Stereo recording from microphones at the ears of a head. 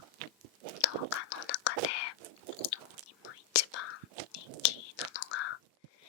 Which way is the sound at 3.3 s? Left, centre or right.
Left.